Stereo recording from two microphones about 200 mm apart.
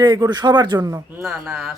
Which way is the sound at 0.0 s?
20° right (ahead or behind).